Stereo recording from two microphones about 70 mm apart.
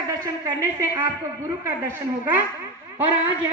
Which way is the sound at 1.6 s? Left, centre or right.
Right.